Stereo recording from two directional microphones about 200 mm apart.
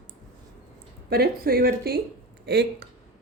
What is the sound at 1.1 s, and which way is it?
Speech, 50° right (ahead or behind).